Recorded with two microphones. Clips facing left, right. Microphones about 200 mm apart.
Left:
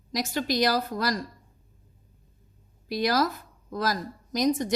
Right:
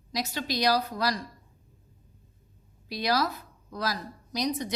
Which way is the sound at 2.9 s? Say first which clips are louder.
Left 3 dB; 50° left (ahead or behind).